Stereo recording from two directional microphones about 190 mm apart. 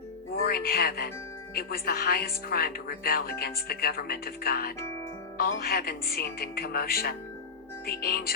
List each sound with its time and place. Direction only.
0.3 s speech: 55° left (ahead or behind)